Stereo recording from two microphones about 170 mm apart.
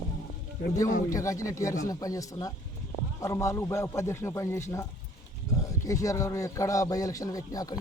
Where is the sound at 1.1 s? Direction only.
20° left (ahead or behind).